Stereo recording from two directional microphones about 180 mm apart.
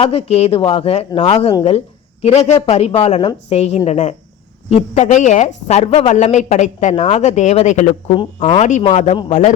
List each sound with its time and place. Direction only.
0.0 s a woman's voice: 35° left (ahead or behind)